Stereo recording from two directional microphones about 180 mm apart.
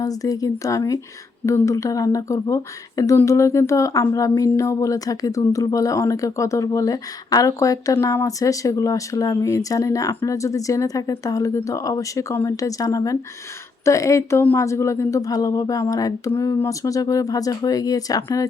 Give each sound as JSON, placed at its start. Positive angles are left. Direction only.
{"t": 0.0, "sound": "speech", "side_deg": 20}